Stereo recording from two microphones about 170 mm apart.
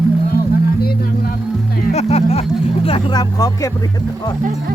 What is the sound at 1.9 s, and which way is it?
Vehicle, 40° left (ahead or behind).